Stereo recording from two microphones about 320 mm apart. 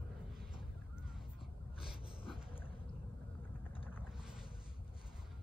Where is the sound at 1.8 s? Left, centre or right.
Centre.